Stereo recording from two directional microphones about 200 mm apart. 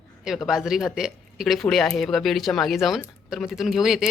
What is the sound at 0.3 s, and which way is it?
Speech, centre (ahead or behind).